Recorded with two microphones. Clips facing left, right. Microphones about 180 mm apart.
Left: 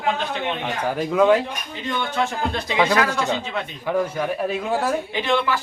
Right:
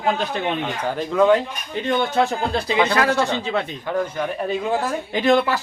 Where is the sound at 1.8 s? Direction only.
40° right (ahead or behind).